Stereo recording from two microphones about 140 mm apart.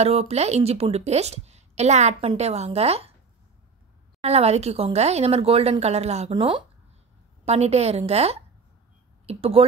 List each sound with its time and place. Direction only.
0.0 s a woman's voice: 50° right (ahead or behind)
4.2 s a woman's voice: 50° right (ahead or behind)
6.3 s speech: 35° right (ahead or behind)
7.4 s a woman's voice: 50° right (ahead or behind)